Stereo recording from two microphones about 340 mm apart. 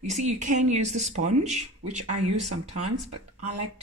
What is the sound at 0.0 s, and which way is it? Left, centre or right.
Speech, centre.